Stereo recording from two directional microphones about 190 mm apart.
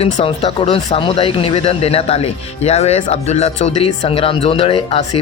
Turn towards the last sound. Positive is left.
turn(degrees=30)  # may be behind; listen again after turning